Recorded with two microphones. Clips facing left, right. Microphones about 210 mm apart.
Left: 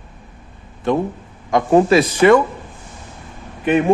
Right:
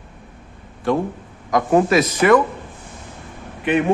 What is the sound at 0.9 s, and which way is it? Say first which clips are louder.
Speech: left 1 dB; 20° left (ahead or behind).